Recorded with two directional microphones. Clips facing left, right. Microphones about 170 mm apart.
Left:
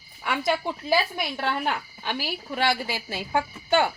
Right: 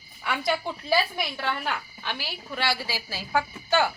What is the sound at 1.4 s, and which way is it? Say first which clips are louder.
Speech: left 5 dB; 50° left (ahead or behind).